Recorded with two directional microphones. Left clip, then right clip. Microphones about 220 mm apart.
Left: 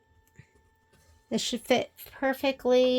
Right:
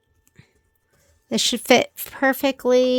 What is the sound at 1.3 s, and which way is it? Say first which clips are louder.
Speech: right 10 dB; 35° right (ahead or behind).